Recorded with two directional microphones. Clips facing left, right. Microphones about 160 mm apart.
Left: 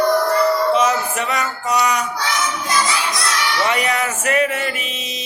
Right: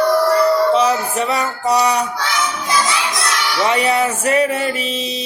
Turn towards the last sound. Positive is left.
turn(degrees=-30)  # may be behind; listen again after turning